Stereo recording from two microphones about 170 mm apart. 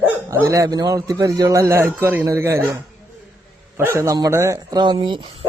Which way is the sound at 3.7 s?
15° right (ahead or behind).